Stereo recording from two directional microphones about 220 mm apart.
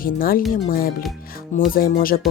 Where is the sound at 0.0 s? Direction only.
40° left (ahead or behind).